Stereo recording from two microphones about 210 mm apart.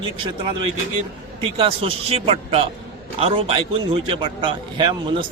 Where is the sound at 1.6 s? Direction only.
25° right (ahead or behind).